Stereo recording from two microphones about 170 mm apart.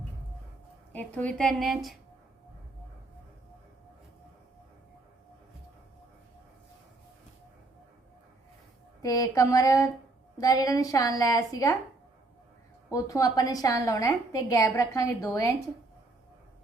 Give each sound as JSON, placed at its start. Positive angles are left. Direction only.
{"t": 0.9, "sound": "a woman's voice", "side_deg": 10}
{"t": 9.0, "sound": "a woman's voice", "side_deg": 20}
{"t": 12.9, "sound": "a woman's voice", "side_deg": 20}